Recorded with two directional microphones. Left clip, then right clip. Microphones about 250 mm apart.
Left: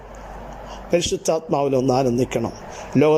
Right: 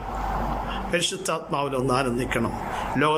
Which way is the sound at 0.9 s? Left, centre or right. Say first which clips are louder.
Left 7 dB; centre.